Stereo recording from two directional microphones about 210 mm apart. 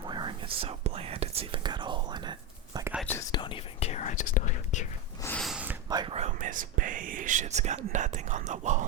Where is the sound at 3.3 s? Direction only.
20° left (ahead or behind).